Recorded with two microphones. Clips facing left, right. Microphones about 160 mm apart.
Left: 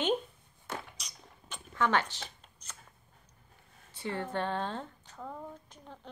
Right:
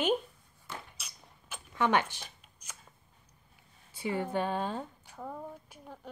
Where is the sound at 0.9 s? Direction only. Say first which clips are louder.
Left 1 dB; 5° right (ahead or behind).